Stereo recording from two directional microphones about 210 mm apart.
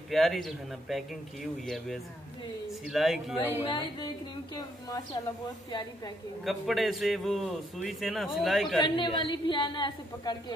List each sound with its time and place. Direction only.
0.1 s a man's voice: centre (ahead or behind)
3.6 s a woman's voice: 20° left (ahead or behind)
6.4 s a man's voice: centre (ahead or behind)
8.8 s a woman's voice: 25° left (ahead or behind)